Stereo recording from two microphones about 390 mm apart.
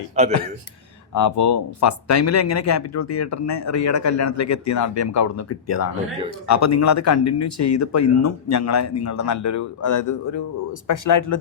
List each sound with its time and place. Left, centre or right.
1.1 s speech: left